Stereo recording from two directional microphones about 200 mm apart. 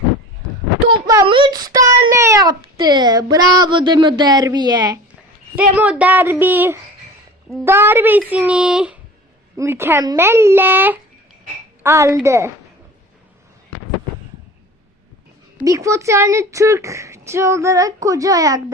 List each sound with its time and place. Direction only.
1.0 s a child's voice: 20° right (ahead or behind)
5.5 s a woman's voice: 10° right (ahead or behind)
15.5 s speech: 15° right (ahead or behind)